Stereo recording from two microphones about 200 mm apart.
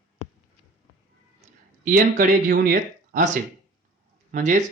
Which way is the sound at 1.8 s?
40° right (ahead or behind).